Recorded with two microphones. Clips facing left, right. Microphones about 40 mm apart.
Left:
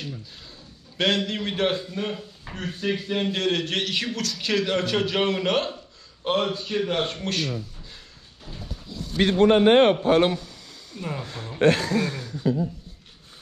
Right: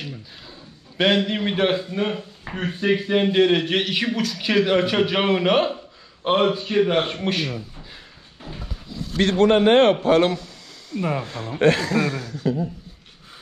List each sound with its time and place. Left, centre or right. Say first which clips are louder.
0.9 s a man's voice: right 4 dB; centre
9.4 s a man's voice: right 1 dB; right
11.0 s speech: right 8 dB; right
11.6 s a man's voice: right 2 dB; right
11.9 s a man's voice: right 3 dB; right